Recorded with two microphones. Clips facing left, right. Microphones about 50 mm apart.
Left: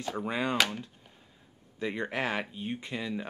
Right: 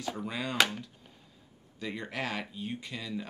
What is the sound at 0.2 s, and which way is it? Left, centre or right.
Speech, left.